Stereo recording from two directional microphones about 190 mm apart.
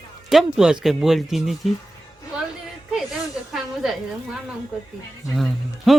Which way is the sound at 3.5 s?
Centre (ahead or behind).